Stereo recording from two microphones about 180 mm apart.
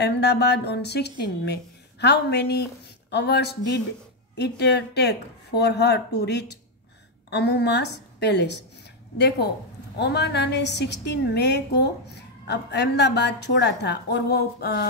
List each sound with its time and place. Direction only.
0.0 s a woman's voice: 70° left (ahead or behind)
9.9 s a woman's voice: 65° left (ahead or behind)